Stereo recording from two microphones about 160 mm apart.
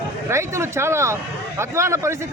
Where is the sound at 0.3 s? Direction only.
15° right (ahead or behind).